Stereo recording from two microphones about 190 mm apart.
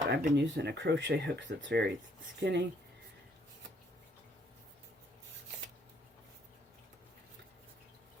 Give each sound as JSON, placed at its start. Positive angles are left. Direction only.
{"t": 0.1, "sound": "speech", "side_deg": -45}
{"t": 0.3, "sound": "speech", "side_deg": -70}